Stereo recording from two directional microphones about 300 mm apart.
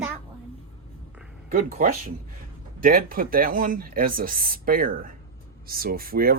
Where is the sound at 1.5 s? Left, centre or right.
Right.